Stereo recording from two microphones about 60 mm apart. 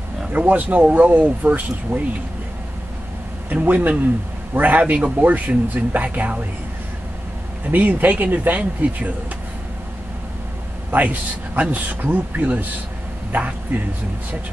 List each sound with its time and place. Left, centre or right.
0.3 s speech: right
3.4 s speech: right
7.7 s speech: right
10.9 s speech: right